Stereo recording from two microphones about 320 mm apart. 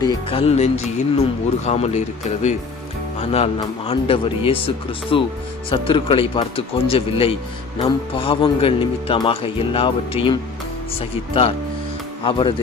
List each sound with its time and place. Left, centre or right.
0.0 s speech: centre
12.2 s speech: centre